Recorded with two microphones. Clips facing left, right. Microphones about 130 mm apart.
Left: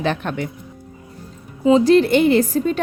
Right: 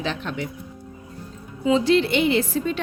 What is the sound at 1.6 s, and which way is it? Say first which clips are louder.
Speech: left 6 dB; 40° left (ahead or behind).